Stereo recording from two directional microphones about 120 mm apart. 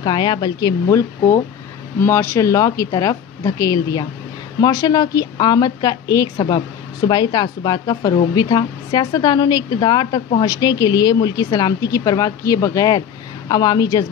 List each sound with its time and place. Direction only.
0.0 s speech: 40° left (ahead or behind)